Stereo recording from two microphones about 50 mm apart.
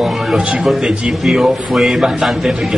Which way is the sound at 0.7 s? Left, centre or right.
Centre.